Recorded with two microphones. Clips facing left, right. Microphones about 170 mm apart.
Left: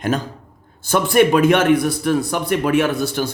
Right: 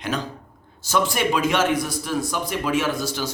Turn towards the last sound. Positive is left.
turn(degrees=60)  # may be behind; listen again after turning